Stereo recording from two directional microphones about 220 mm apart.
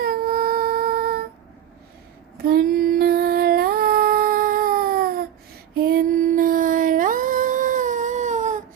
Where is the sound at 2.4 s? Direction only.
45° right (ahead or behind).